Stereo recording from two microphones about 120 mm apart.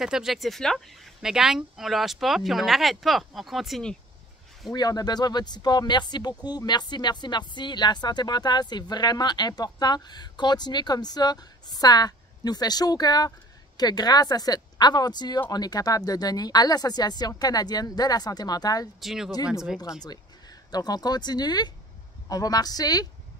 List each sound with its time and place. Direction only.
0.0 s speech: 5° right (ahead or behind)
4.7 s speech: 35° left (ahead or behind)
18.9 s speech: 5° right (ahead or behind)
20.0 s speech: 35° left (ahead or behind)